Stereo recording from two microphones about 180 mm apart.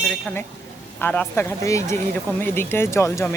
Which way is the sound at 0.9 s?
10° left (ahead or behind).